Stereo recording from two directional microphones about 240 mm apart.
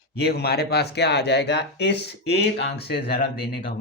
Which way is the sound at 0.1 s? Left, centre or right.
Left.